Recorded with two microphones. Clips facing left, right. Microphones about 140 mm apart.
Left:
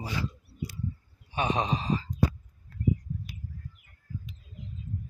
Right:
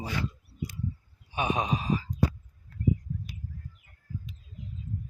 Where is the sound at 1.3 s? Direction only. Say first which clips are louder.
Even; 10° right (ahead or behind).